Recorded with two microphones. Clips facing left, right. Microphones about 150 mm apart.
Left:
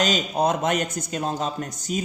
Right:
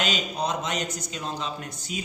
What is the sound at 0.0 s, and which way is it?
Speech, 45° left (ahead or behind).